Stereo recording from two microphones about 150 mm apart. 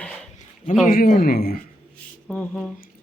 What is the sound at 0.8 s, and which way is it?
Speech, 65° left (ahead or behind).